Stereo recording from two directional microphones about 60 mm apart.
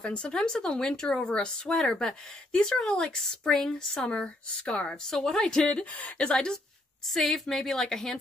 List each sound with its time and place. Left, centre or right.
0.0 s speech: centre
5.9 s speech: left
7.1 s a woman's voice: centre